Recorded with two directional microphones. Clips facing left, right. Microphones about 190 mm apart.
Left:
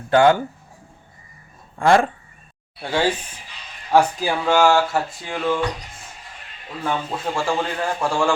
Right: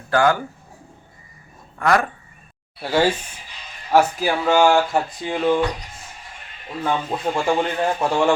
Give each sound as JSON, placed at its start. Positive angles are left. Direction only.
{"t": 0.1, "sound": "speech", "side_deg": 25}
{"t": 1.8, "sound": "speech", "side_deg": 25}
{"t": 2.8, "sound": "a man's voice", "side_deg": -10}
{"t": 6.8, "sound": "a man's voice", "side_deg": -20}